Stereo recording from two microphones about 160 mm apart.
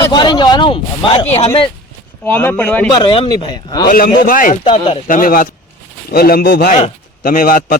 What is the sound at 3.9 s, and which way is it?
Speech, 65° left (ahead or behind).